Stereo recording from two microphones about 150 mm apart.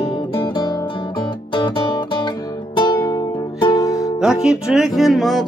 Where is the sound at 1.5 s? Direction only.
30° left (ahead or behind).